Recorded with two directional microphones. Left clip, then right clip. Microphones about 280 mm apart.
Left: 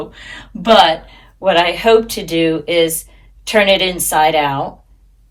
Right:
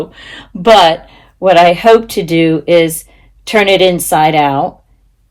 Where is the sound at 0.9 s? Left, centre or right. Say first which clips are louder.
Right 3 dB; right.